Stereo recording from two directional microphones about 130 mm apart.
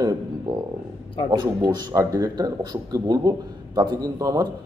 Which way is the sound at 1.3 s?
30° right (ahead or behind).